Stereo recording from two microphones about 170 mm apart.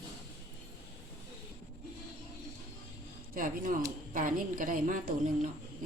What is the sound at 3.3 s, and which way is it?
A man's voice, 55° right (ahead or behind).